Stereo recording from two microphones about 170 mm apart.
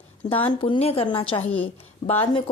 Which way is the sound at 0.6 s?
35° left (ahead or behind).